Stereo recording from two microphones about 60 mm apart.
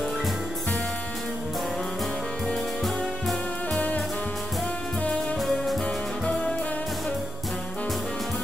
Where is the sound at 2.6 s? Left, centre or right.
Centre.